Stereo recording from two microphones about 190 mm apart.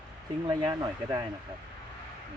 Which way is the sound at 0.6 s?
20° right (ahead or behind).